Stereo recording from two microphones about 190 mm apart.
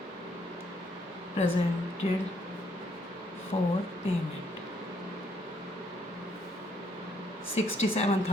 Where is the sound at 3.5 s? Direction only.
30° left (ahead or behind).